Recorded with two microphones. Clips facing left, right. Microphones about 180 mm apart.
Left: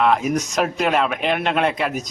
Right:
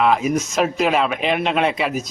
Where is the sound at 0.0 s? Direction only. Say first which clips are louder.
Right 1 dB; centre (ahead or behind).